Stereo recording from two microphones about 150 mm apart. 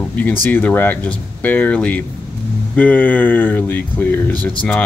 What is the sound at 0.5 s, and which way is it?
Speech, 10° left (ahead or behind).